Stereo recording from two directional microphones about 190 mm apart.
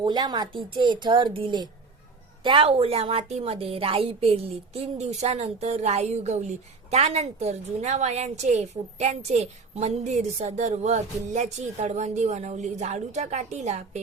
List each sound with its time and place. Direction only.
0.0 s a woman's voice: 20° right (ahead or behind)